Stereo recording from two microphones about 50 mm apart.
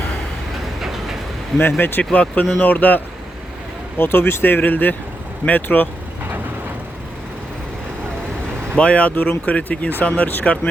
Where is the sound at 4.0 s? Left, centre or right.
Left.